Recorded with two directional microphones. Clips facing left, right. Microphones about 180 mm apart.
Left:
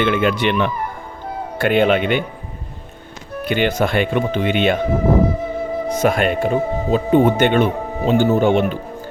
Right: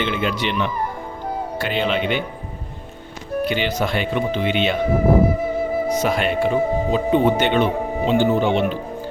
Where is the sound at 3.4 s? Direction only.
55° left (ahead or behind).